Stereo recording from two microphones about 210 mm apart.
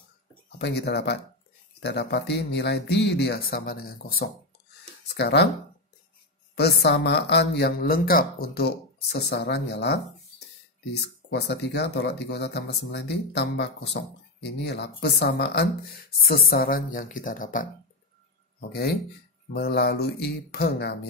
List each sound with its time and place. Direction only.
0.6 s speech: 55° left (ahead or behind)
6.5 s speech: 50° left (ahead or behind)
18.7 s speech: 50° left (ahead or behind)